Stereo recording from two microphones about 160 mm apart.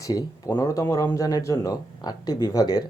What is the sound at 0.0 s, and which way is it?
Speech, 20° left (ahead or behind).